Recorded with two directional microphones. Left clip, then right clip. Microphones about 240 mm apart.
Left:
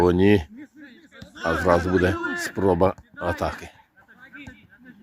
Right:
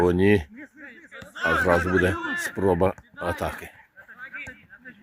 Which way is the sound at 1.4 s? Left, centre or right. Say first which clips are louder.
Even; centre.